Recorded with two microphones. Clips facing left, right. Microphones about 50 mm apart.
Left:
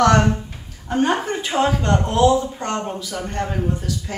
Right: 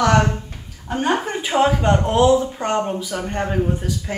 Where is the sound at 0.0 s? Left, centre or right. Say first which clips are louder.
Left 1 dB; centre.